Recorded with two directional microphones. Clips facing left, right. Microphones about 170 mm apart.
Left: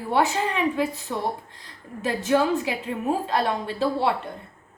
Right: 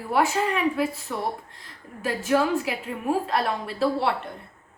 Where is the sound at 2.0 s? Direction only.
25° left (ahead or behind).